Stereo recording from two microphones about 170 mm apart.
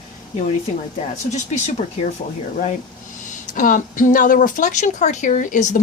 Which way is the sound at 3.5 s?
50° left (ahead or behind).